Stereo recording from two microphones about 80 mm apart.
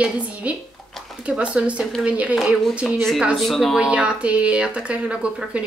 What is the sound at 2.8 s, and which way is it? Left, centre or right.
Speech, centre.